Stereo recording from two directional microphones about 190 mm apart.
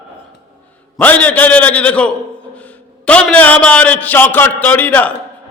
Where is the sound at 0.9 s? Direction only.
10° left (ahead or behind).